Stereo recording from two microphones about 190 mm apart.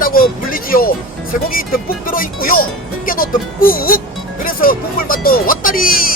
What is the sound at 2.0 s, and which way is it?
Speech, 50° left (ahead or behind).